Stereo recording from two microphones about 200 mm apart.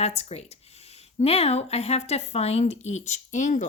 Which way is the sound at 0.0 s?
30° left (ahead or behind).